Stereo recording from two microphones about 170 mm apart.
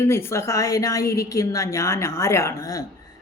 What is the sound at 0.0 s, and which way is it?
A woman's voice, 15° left (ahead or behind).